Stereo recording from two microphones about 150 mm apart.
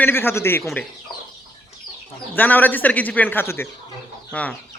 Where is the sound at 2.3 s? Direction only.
10° left (ahead or behind).